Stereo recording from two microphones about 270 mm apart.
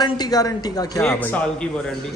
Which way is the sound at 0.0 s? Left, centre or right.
Centre.